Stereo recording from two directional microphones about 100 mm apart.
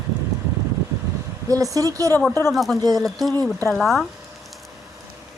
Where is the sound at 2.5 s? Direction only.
Centre (ahead or behind).